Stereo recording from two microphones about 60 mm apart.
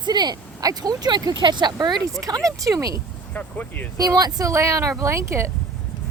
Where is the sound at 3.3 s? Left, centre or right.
Left.